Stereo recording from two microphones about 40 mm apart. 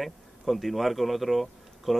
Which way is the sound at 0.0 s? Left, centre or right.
Centre.